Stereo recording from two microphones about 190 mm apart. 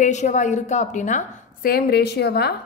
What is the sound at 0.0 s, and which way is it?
A woman's voice, 40° left (ahead or behind).